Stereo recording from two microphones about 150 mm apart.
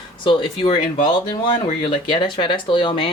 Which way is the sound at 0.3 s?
35° left (ahead or behind).